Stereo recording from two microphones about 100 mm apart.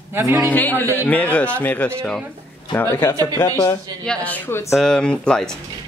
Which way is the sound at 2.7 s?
25° left (ahead or behind).